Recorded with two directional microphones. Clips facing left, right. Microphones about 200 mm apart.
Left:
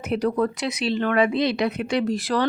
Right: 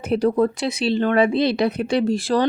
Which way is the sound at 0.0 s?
30° right (ahead or behind).